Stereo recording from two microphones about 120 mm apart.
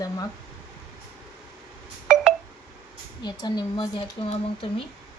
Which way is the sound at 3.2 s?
40° left (ahead or behind).